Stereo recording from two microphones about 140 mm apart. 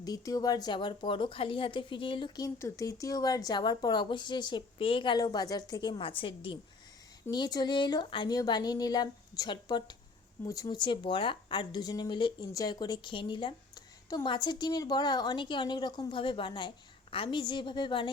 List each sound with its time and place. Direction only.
0.0 s a woman's voice: 25° left (ahead or behind)
6.0 s a woman's voice: 40° left (ahead or behind)